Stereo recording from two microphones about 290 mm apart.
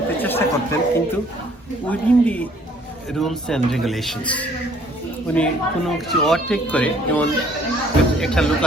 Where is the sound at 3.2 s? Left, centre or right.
Centre.